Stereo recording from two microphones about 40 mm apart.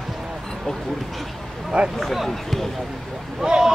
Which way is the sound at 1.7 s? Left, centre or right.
Right.